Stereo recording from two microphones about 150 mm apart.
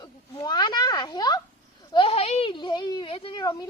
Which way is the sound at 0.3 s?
30° left (ahead or behind).